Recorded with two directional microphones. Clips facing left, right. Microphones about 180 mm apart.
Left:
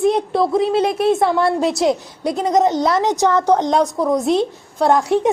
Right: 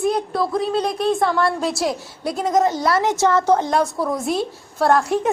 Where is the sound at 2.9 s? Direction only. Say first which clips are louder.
Left 2 dB; 15° left (ahead or behind).